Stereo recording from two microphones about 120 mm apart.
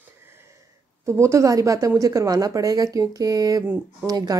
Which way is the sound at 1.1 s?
25° right (ahead or behind).